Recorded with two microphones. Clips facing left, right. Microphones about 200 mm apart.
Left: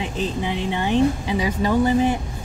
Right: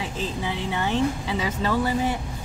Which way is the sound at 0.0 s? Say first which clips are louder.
Left 4 dB; 20° left (ahead or behind).